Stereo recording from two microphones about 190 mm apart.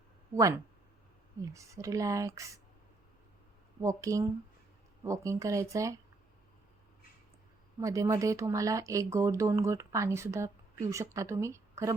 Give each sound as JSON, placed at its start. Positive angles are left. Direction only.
{"t": 0.3, "sound": "speech", "side_deg": -15}
{"t": 3.8, "sound": "speech", "side_deg": -15}
{"t": 7.8, "sound": "speech", "side_deg": -15}